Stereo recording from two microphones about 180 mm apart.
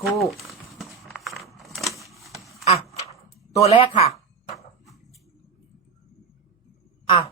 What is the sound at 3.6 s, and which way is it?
Speech, 30° left (ahead or behind).